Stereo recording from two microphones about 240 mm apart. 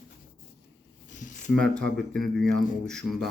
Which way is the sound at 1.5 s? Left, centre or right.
Centre.